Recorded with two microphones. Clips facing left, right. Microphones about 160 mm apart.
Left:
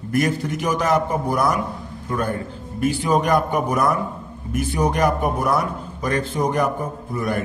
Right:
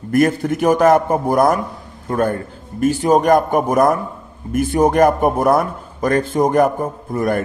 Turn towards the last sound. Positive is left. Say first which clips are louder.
# right 5 dB
turn(degrees=-50)  # may be behind; listen again after turning